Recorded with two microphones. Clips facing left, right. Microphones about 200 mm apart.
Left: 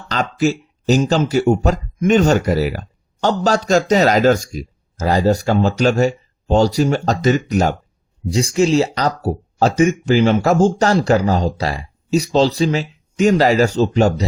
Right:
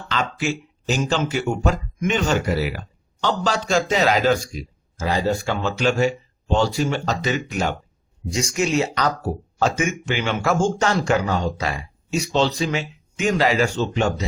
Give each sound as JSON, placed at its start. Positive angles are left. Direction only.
{"t": 0.1, "sound": "speech", "side_deg": 40}